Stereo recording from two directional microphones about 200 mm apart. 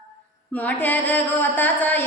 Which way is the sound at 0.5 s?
10° left (ahead or behind).